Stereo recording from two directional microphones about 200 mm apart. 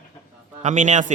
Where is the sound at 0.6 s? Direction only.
35° right (ahead or behind).